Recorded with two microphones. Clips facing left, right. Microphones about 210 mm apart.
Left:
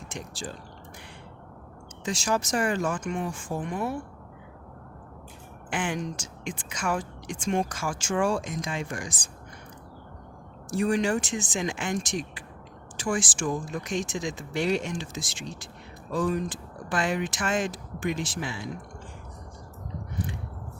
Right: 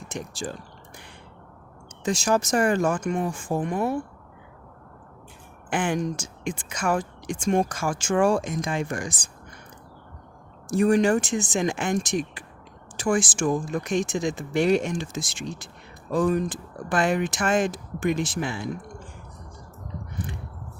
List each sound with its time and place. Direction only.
0.1 s speech: 45° right (ahead or behind)
2.0 s speech: 45° right (ahead or behind)
5.7 s speech: 50° right (ahead or behind)
10.8 s speech: 45° right (ahead or behind)